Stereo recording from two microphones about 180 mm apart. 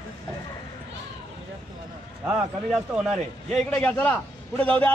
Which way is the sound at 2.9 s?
Centre (ahead or behind).